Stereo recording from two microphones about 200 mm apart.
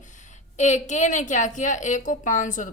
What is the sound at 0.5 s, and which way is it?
A woman's voice, 35° left (ahead or behind).